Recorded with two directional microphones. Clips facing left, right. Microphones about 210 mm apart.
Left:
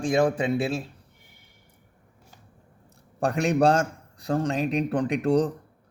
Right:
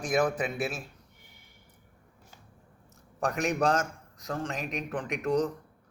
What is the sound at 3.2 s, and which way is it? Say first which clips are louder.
A man's voice: left 6 dB; 30° left (ahead or behind).